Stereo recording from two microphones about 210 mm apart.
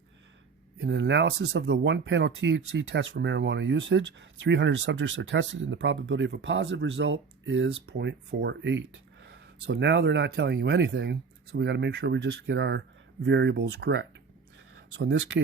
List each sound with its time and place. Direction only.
0.8 s speech: 55° right (ahead or behind)